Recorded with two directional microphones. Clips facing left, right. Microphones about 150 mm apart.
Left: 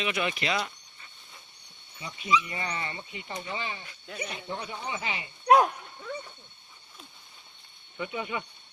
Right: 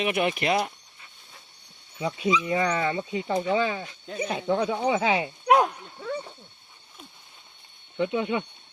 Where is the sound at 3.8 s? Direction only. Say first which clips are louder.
Right 7 dB; 25° right (ahead or behind).